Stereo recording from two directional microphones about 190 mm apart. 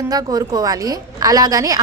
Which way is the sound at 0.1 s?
20° right (ahead or behind).